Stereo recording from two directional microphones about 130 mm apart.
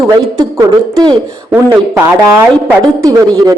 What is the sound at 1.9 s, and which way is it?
Speech, 20° right (ahead or behind).